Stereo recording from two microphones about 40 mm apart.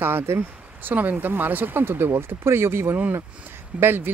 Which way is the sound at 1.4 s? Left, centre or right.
Right.